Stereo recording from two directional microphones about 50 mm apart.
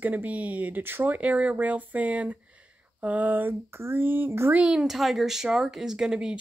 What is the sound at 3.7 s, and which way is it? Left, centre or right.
Speech, right.